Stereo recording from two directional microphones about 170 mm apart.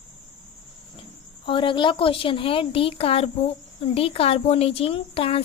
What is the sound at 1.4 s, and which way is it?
A woman's voice, 30° left (ahead or behind).